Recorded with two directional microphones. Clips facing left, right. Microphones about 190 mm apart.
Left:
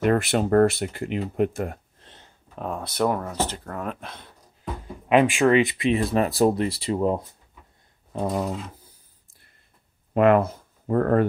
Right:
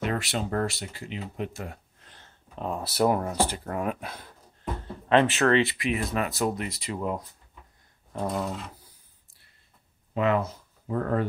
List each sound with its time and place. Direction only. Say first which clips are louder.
0.0 s speech: left 8 dB; 55° left (ahead or behind)
2.0 s a sound: left 3 dB; 25° left (ahead or behind)
2.5 s speech: left 1 dB; centre (ahead or behind)
4.8 s speech: left 3 dB; 10° left (ahead or behind); by 7.2 s 30° left (ahead or behind)
8.5 s speech: left 4 dB; centre (ahead or behind)
10.1 s speech: left 7 dB; 60° left (ahead or behind)